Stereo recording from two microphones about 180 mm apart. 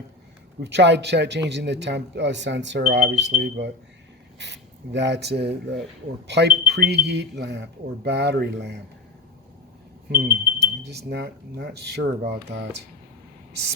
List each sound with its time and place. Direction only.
0.6 s speech: 70° right (ahead or behind)
10.1 s speech: 60° right (ahead or behind)